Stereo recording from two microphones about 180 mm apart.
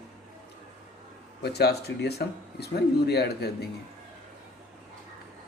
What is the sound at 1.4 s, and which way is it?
Speech, 65° left (ahead or behind).